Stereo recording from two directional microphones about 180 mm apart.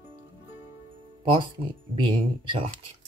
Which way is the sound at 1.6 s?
30° right (ahead or behind).